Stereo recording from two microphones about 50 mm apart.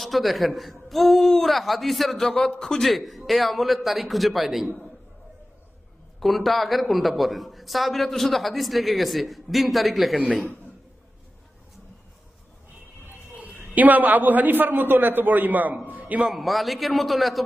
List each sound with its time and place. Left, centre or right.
0.0 s a man's voice: centre
2.9 s a man's voice: centre
6.1 s a man's voice: centre
13.3 s a sound: right
13.7 s a man's voice: right
16.2 s a man's voice: centre